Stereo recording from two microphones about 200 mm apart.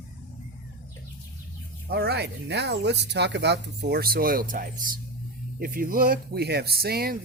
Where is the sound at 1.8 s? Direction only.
50° right (ahead or behind).